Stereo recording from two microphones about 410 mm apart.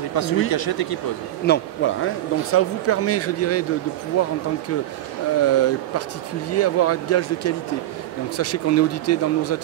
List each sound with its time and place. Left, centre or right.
0.1 s speech: left
1.4 s speech: left
5.4 s speech: left